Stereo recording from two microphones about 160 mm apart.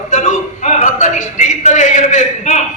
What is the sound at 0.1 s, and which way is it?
A man's voice, 50° left (ahead or behind).